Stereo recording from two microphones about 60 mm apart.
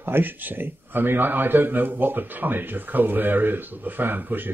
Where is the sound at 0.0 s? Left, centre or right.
Right.